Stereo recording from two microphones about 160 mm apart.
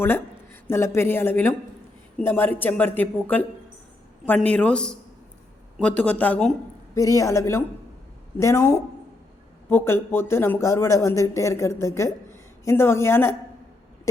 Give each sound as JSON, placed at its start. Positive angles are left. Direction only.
{"t": 0.0, "sound": "speech", "side_deg": 15}
{"t": 6.9, "sound": "a man's voice", "side_deg": 20}